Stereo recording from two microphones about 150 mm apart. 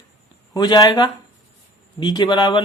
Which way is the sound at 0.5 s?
25° left (ahead or behind).